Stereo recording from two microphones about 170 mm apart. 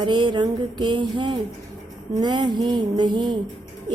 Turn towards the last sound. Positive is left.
turn(degrees=-25)  # may be behind; listen again after turning